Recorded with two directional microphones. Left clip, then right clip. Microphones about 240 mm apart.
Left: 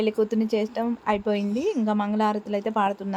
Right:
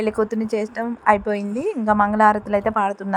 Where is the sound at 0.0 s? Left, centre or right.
Centre.